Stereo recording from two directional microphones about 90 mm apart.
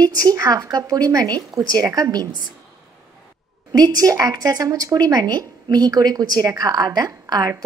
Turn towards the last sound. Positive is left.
turn(degrees=-45)  # may be behind; listen again after turning